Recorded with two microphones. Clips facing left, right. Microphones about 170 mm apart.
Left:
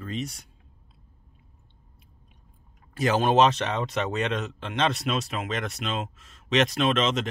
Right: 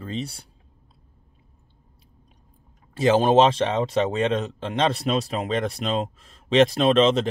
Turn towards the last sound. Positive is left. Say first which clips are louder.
# right 6 dB
turn(degrees=-35)  # may be behind; listen again after turning